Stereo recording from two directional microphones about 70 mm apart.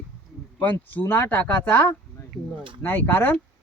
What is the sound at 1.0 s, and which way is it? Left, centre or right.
Speech, left.